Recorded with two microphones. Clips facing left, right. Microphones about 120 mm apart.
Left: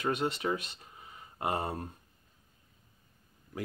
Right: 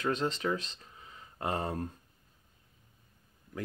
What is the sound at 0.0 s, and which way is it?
Speech, 10° left (ahead or behind).